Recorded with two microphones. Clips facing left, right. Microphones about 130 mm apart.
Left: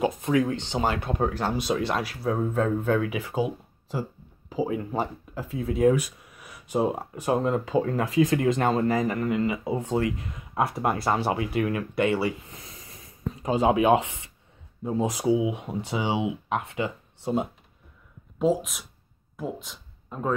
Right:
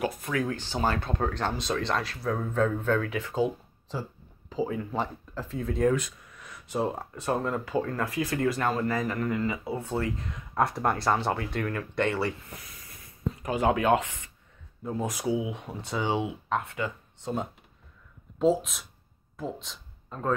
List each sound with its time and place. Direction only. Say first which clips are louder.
0.0 s speech: left 6 dB; 20° left (ahead or behind)
10.3 s speech: even; 5° left (ahead or behind)
12.7 s a sound: left 3 dB; 20° left (ahead or behind)
14.9 s speech: left 5 dB; 15° left (ahead or behind)
18.4 s speech: even; centre (ahead or behind)